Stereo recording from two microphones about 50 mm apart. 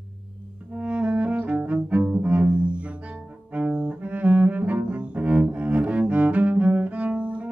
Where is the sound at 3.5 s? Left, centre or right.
Right.